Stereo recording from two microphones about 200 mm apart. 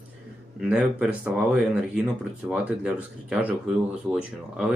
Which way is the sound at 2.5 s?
5° right (ahead or behind).